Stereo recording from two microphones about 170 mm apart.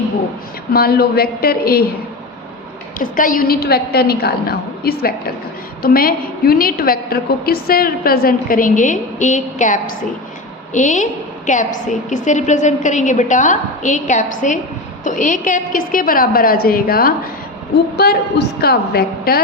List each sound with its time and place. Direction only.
0.7 s a woman's voice: 65° left (ahead or behind)
3.0 s a woman's voice: 55° left (ahead or behind)